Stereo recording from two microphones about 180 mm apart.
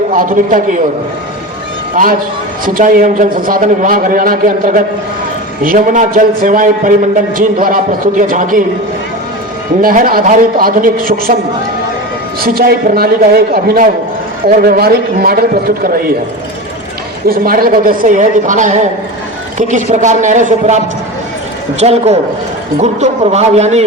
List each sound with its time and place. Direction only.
0.1 s a man's voice: 50° right (ahead or behind)
2.0 s a man's voice: 50° right (ahead or behind)
9.8 s a man's voice: 50° right (ahead or behind)
12.4 s a man's voice: 55° right (ahead or behind)
17.2 s a man's voice: 55° right (ahead or behind); by 23.8 s 40° right (ahead or behind)